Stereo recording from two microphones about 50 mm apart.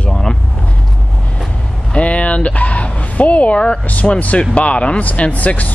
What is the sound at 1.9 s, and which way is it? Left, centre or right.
Speech, left.